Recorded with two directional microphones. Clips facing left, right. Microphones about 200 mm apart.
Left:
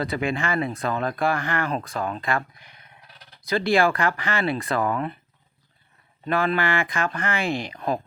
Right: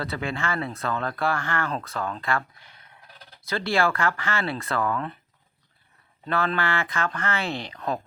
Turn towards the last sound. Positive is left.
turn(degrees=10)  # may be behind; listen again after turning